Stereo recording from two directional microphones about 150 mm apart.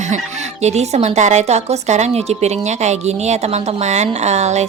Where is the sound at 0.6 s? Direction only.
50° right (ahead or behind).